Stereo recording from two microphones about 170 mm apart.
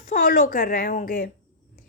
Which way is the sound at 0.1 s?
55° left (ahead or behind).